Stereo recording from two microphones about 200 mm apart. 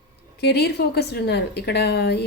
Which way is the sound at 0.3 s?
55° left (ahead or behind).